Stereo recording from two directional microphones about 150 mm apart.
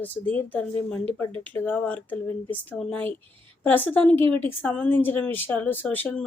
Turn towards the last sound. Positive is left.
turn(degrees=10)  # may be behind; listen again after turning